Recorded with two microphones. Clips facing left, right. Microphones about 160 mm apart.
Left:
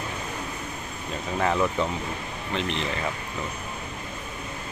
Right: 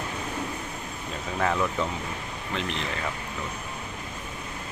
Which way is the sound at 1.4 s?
5° left (ahead or behind).